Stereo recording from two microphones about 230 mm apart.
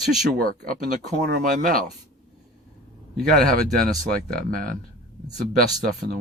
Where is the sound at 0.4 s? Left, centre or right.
Right.